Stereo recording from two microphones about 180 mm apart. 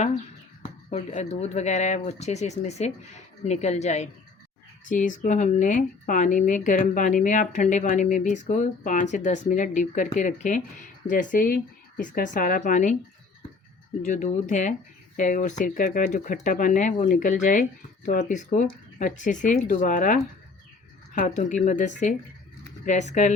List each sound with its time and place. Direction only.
0.9 s speech: 40° left (ahead or behind)
14.0 s speech: 45° left (ahead or behind)
21.2 s speech: 40° left (ahead or behind)